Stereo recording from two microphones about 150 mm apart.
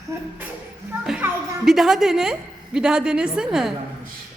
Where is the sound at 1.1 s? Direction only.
5° right (ahead or behind).